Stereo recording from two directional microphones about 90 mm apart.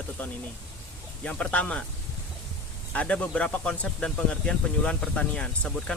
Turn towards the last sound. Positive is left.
turn(degrees=10)  # may be behind; listen again after turning